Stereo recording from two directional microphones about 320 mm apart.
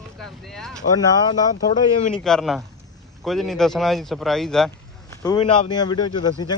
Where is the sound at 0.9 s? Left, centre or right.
Centre.